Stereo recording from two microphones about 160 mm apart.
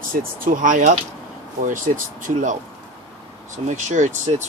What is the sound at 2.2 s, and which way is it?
Speech, 50° right (ahead or behind).